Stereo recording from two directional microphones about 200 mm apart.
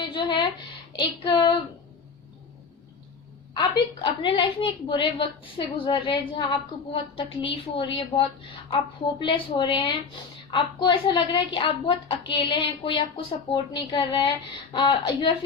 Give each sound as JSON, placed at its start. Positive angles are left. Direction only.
{"t": 0.0, "sound": "a sound", "side_deg": 25}
{"t": 0.9, "sound": "a woman's voice", "side_deg": 25}
{"t": 3.5, "sound": "a woman's voice", "side_deg": 25}